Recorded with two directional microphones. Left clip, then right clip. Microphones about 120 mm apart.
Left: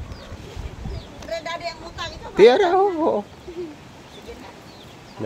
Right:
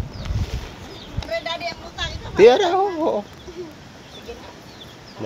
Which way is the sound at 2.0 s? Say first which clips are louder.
Right 1 dB; 35° left (ahead or behind).